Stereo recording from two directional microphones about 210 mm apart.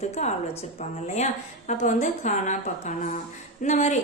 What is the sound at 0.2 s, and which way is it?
Speech, 35° left (ahead or behind).